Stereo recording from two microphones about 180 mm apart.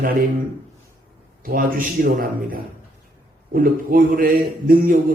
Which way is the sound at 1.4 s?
50° right (ahead or behind).